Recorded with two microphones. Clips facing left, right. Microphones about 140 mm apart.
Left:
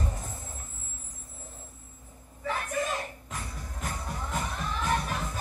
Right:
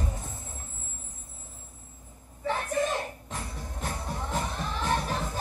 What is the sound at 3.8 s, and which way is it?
Music, 30° right (ahead or behind).